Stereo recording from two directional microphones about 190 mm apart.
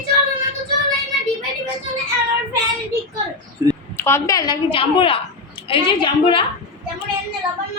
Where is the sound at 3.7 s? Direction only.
10° left (ahead or behind).